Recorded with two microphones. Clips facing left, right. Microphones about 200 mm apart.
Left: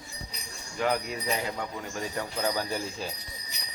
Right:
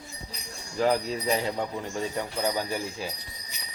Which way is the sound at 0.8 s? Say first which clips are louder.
Right 4 dB; 30° right (ahead or behind).